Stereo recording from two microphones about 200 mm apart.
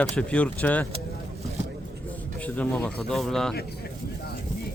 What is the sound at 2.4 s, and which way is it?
Speech, 5° left (ahead or behind).